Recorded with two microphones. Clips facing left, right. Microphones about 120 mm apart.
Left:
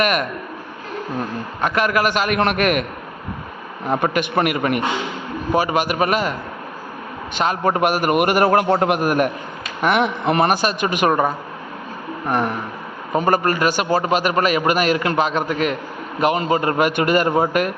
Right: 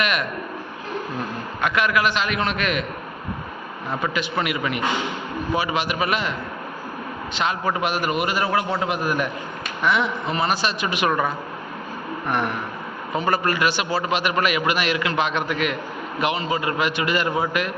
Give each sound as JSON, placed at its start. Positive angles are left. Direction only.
{"t": 0.0, "sound": "a man's voice", "side_deg": 45}
{"t": 1.6, "sound": "a man's voice", "side_deg": 40}
{"t": 3.8, "sound": "a man's voice", "side_deg": 55}
{"t": 7.3, "sound": "a man's voice", "side_deg": 45}
{"t": 11.1, "sound": "a man's voice", "side_deg": 35}